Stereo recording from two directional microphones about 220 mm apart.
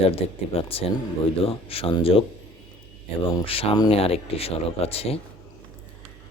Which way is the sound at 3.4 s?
25° left (ahead or behind).